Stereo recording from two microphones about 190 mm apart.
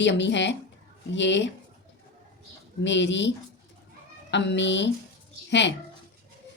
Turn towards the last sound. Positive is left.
turn(degrees=65)  # may be behind; listen again after turning